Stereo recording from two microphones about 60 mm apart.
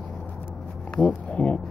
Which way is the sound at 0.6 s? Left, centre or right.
Centre.